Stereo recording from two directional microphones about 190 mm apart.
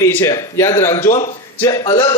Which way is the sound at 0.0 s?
10° left (ahead or behind).